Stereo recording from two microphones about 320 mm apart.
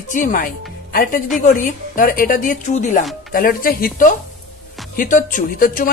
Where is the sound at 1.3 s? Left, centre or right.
Left.